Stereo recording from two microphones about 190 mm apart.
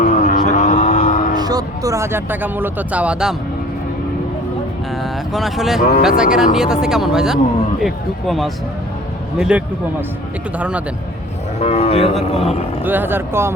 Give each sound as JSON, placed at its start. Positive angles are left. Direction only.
{"t": 0.0, "sound": "a sound", "side_deg": 45}
{"t": 1.4, "sound": "speech", "side_deg": -20}
{"t": 5.0, "sound": "speech", "side_deg": 0}
{"t": 11.6, "sound": "speech", "side_deg": 30}
{"t": 12.8, "sound": "speech", "side_deg": -10}